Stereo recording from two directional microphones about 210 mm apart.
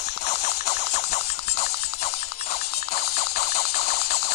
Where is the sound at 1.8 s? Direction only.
30° left (ahead or behind).